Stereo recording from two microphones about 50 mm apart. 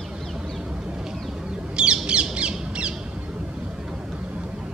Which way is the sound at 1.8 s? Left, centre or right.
Centre.